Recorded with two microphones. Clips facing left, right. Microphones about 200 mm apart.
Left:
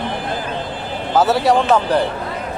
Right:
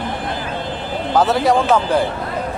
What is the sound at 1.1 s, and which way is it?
Speech, centre (ahead or behind).